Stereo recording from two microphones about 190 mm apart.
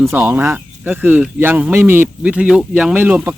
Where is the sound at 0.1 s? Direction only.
10° right (ahead or behind).